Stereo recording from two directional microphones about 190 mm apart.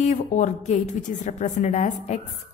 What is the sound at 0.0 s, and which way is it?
A woman's voice, 40° left (ahead or behind).